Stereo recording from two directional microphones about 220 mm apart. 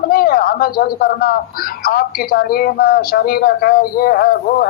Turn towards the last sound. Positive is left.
turn(degrees=45)  # may be behind; listen again after turning